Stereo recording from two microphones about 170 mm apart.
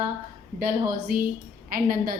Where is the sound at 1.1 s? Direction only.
60° right (ahead or behind).